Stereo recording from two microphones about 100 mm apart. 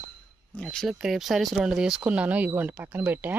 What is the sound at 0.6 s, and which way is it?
Speech, centre (ahead or behind).